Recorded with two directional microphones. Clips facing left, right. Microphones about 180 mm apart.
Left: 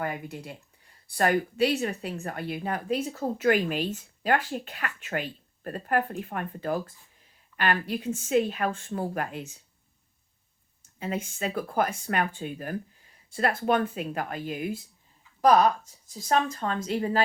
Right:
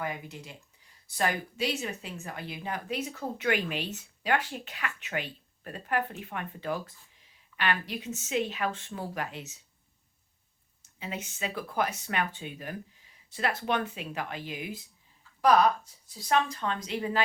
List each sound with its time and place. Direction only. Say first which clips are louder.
0.0 s speech: left 4 dB; 55° left (ahead or behind)
11.0 s a woman's voice: left 5 dB; 45° left (ahead or behind)